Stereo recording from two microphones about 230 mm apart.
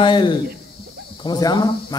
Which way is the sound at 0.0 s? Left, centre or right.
Left.